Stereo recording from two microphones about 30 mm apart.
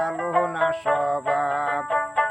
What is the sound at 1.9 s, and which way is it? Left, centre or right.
Music, left.